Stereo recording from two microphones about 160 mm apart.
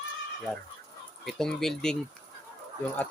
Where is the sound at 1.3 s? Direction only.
5° left (ahead or behind).